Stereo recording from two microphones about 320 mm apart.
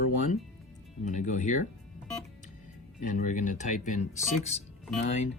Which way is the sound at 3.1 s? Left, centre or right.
Left.